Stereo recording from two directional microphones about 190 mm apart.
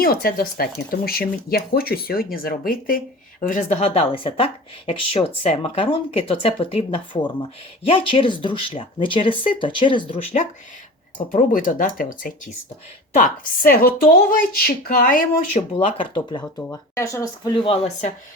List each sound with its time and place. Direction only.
0.0 s speech: 50° left (ahead or behind); by 10.2 s 25° left (ahead or behind)
11.3 s speech: 45° left (ahead or behind)
15.5 s speech: 30° left (ahead or behind)